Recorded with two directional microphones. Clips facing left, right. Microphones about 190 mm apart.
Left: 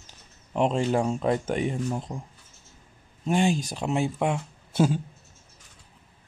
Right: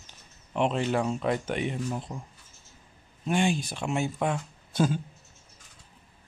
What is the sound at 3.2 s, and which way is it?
Speech, 40° left (ahead or behind).